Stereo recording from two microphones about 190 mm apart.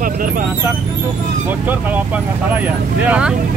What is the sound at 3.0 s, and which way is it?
Speech, 5° right (ahead or behind).